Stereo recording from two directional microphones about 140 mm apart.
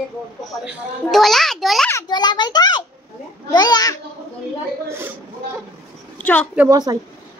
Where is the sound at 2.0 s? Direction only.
30° left (ahead or behind).